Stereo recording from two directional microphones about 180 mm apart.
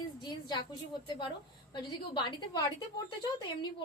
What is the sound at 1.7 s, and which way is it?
Speech, 25° left (ahead or behind).